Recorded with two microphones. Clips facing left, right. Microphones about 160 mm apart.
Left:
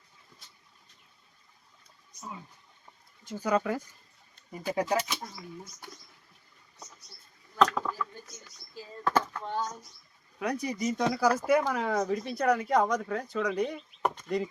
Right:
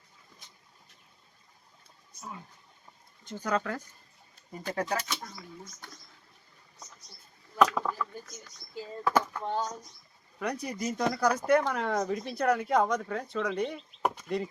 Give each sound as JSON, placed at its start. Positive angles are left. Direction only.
{"t": 3.2, "sound": "speech", "side_deg": 10}
{"t": 7.5, "sound": "a sound", "side_deg": -10}
{"t": 9.0, "sound": "speech", "side_deg": -10}
{"t": 10.4, "sound": "speech", "side_deg": 0}